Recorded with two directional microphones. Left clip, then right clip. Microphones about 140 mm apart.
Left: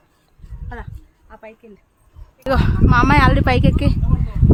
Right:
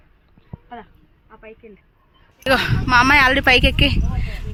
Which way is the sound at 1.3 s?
70° right (ahead or behind).